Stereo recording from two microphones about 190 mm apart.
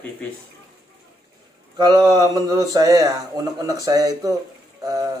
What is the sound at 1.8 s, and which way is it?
Speech, 20° right (ahead or behind).